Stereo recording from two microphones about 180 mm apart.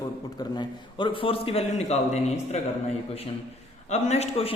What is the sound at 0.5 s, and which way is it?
Speech, 25° left (ahead or behind).